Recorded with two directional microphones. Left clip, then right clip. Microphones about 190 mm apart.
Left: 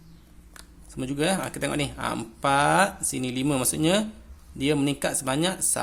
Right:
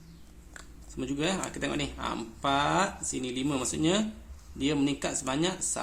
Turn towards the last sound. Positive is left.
turn(degrees=35)  # may be behind; listen again after turning